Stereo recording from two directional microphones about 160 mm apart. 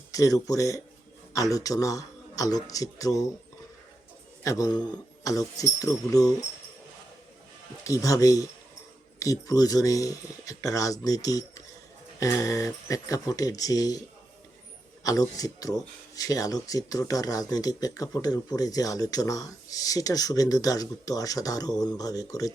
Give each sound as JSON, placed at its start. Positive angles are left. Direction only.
{"t": 0.1, "sound": "speech", "side_deg": 20}
{"t": 4.4, "sound": "speech", "side_deg": 20}
{"t": 7.9, "sound": "speech", "side_deg": 20}
{"t": 15.0, "sound": "speech", "side_deg": 20}